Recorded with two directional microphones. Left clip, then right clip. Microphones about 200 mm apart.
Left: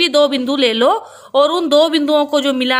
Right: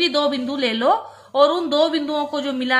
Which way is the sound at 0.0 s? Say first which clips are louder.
Left 6 dB; 50° left (ahead or behind).